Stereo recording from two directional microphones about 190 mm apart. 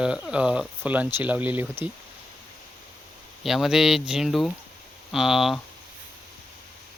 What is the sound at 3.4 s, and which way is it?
Speech, centre (ahead or behind).